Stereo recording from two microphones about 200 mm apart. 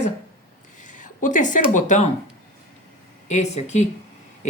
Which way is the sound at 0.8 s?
40° left (ahead or behind).